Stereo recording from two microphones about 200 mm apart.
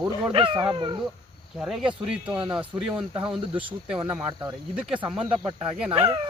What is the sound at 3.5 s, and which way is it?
Speech, 25° right (ahead or behind).